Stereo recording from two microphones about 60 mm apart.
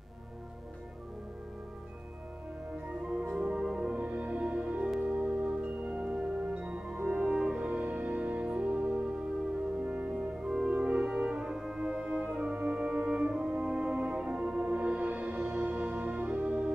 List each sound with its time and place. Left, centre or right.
3.0 s music: centre
10.4 s music: centre